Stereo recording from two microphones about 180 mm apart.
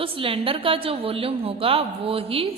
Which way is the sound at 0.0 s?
30° right (ahead or behind).